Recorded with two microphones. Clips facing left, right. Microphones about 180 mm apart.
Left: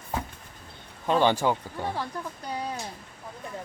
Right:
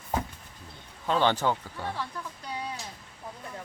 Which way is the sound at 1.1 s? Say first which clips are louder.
Left 3 dB; 15° left (ahead or behind).